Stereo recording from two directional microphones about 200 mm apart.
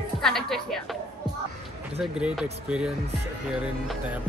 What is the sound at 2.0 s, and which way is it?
A woman's voice, 5° right (ahead or behind).